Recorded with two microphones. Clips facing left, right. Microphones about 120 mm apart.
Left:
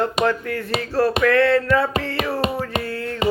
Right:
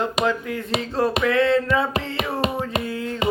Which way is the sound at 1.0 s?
20° right (ahead or behind).